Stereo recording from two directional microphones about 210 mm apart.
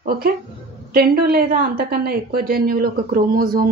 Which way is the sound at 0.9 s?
45° right (ahead or behind).